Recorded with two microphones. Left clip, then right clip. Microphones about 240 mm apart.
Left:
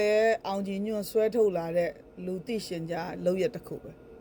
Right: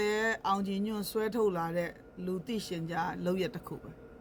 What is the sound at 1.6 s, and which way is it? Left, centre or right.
Speech, right.